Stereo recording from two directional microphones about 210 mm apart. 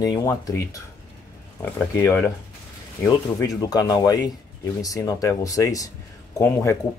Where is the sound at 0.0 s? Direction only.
15° left (ahead or behind).